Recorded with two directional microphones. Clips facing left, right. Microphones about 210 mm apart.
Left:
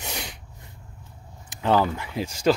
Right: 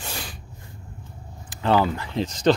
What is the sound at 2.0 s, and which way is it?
Speech, 10° left (ahead or behind).